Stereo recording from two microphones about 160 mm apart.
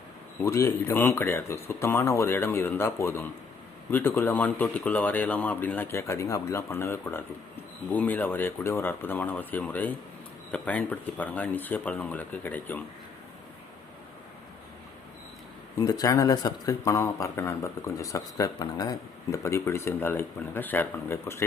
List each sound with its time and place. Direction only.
0.4 s speech: 20° left (ahead or behind)
15.8 s speech: 20° left (ahead or behind)